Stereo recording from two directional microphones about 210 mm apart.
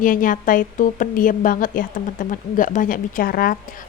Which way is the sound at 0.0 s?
40° left (ahead or behind).